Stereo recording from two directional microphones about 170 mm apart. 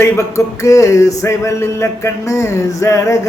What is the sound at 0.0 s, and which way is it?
Speech, 15° left (ahead or behind).